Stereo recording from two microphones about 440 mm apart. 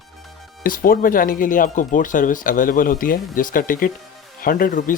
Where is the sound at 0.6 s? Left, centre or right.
Centre.